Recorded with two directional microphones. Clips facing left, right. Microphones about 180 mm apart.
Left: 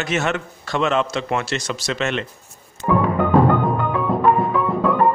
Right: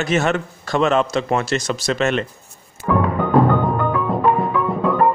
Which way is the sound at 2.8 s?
30° left (ahead or behind).